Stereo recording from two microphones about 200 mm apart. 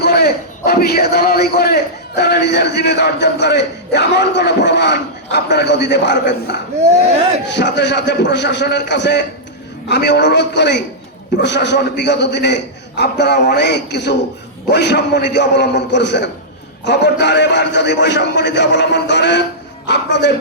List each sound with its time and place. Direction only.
0.0 s a man's voice: 50° left (ahead or behind)